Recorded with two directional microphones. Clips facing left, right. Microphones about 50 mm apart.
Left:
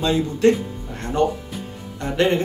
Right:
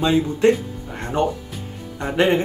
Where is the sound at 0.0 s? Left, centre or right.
Centre.